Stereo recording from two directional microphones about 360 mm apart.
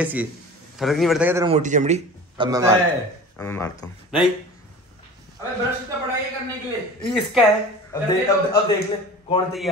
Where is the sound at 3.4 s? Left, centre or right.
Centre.